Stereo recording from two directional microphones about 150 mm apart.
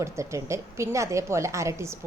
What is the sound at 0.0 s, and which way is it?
A woman's voice, 20° right (ahead or behind).